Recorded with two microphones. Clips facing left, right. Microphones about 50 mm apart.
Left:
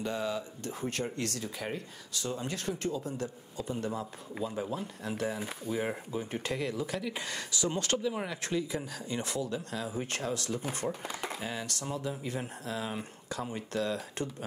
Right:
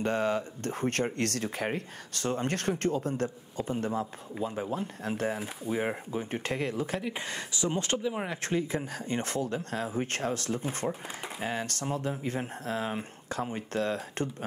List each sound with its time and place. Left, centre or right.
0.0 s speech: right
5.7 s speech: right
6.4 s speech: right
8.3 s speech: right
10.8 s speech: centre
11.4 s speech: right